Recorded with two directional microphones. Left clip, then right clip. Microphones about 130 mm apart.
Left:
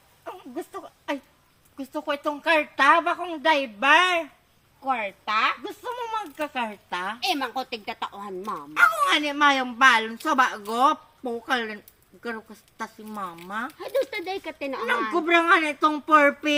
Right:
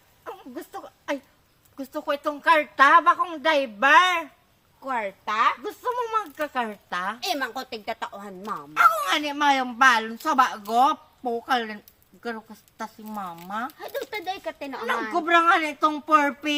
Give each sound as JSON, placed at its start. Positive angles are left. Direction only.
{"t": 0.3, "sound": "a sound", "side_deg": -30}
{"t": 1.7, "sound": "a woman's voice", "side_deg": -30}
{"t": 4.9, "sound": "a woman's voice", "side_deg": -40}
{"t": 7.3, "sound": "a woman's voice", "side_deg": -40}
{"t": 8.7, "sound": "a woman's voice", "side_deg": -25}
{"t": 14.6, "sound": "a woman's voice", "side_deg": -40}